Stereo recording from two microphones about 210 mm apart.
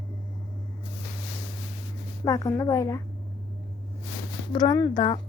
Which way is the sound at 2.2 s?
15° left (ahead or behind).